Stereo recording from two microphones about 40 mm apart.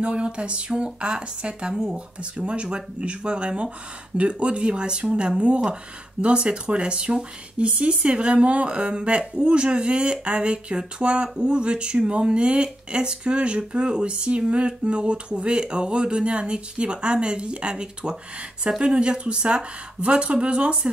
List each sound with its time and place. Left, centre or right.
0.0 s speech: right
2.4 s speech: right